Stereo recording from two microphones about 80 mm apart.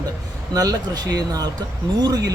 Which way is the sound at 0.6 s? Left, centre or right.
Right.